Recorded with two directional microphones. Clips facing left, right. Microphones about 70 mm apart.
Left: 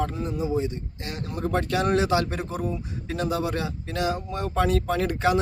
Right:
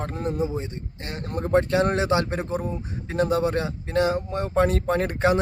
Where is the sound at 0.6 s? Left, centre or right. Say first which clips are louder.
Left 5 dB; right.